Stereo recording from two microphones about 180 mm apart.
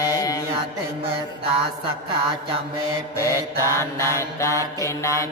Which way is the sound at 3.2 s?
15° left (ahead or behind).